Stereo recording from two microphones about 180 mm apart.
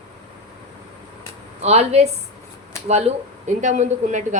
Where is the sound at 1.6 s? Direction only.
35° right (ahead or behind).